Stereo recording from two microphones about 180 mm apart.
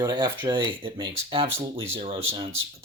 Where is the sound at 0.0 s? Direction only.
25° right (ahead or behind).